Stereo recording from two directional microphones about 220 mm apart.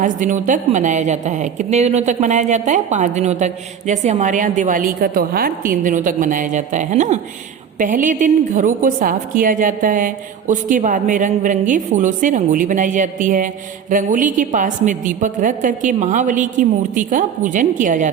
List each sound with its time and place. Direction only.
0.0 s a woman's voice: 35° right (ahead or behind)